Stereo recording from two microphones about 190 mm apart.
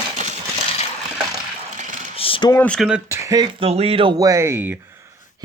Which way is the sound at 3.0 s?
15° right (ahead or behind).